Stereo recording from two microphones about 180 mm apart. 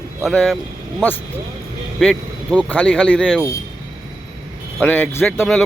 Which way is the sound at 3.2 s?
5° right (ahead or behind).